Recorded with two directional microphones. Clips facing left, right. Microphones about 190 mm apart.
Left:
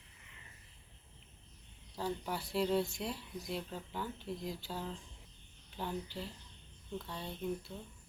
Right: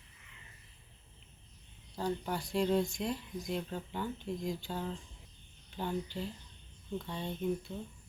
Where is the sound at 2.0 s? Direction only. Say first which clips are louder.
Right 3 dB; 5° left (ahead or behind).